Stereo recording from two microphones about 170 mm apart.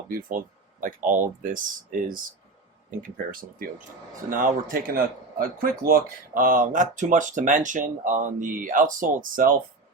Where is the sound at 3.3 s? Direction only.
55° right (ahead or behind).